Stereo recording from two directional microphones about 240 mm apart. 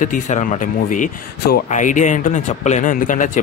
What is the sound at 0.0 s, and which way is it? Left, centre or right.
Speech, left.